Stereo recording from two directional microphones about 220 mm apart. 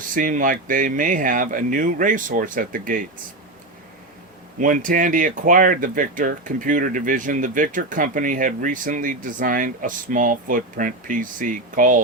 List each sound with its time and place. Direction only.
0.0 s speech: 40° right (ahead or behind)
4.6 s speech: 35° right (ahead or behind)